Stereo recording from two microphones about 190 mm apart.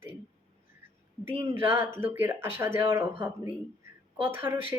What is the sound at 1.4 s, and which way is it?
Speech, 10° right (ahead or behind).